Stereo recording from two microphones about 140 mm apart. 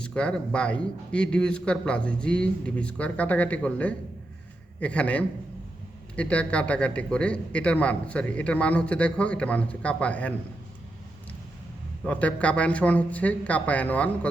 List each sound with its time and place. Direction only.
0.0 s a man's voice: 5° left (ahead or behind)
12.0 s a man's voice: 10° left (ahead or behind)